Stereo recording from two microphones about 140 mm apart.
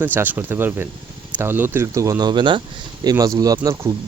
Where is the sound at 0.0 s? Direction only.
15° right (ahead or behind).